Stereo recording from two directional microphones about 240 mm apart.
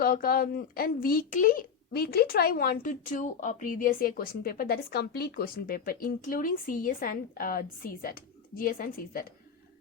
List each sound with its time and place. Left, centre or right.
0.0 s a child's voice: left